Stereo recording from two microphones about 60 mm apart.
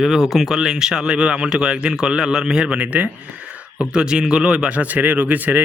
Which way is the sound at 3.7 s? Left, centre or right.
Centre.